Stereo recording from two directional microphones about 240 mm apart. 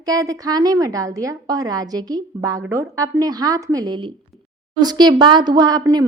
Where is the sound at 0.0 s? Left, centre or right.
Centre.